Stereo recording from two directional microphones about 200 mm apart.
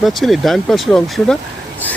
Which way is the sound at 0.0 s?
Centre (ahead or behind).